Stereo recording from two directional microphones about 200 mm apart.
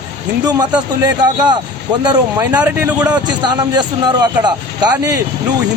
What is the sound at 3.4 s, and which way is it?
Speech, 20° right (ahead or behind).